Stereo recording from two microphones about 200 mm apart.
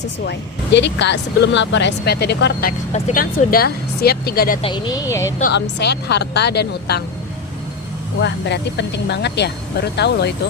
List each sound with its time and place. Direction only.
0.3 s speech: 60° left (ahead or behind)
2.9 s speech: 40° left (ahead or behind)
4.6 s speech: 20° left (ahead or behind)
5.4 s speech: 55° left (ahead or behind)
8.2 s speech: 60° left (ahead or behind)